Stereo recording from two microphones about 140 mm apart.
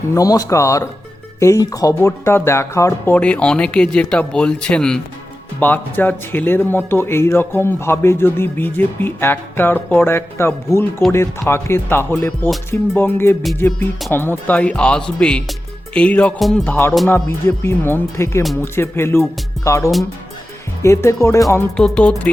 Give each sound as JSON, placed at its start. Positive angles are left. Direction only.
{"t": 0.1, "sound": "speech", "side_deg": 25}
{"t": 3.2, "sound": "speech", "side_deg": 10}
{"t": 21.8, "sound": "music", "side_deg": 5}